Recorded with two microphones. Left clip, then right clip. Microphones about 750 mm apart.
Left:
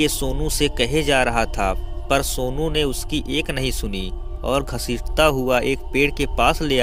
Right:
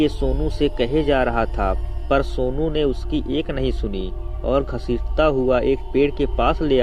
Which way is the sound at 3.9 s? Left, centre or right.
Left.